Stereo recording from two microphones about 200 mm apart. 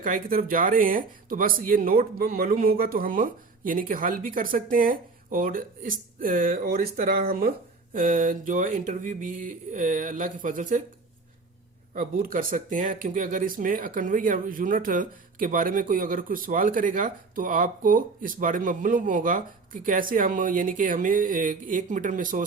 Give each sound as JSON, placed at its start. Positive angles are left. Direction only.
{"t": 0.0, "sound": "speech", "side_deg": -45}
{"t": 11.9, "sound": "speech", "side_deg": -45}